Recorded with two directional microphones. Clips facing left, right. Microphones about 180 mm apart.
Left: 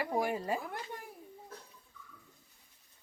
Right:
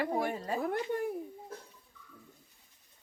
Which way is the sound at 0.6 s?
55° right (ahead or behind).